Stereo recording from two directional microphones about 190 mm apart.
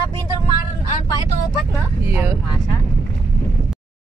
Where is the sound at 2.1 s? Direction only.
15° right (ahead or behind).